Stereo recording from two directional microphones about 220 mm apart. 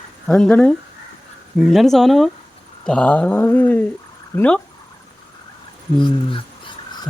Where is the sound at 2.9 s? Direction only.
5° left (ahead or behind).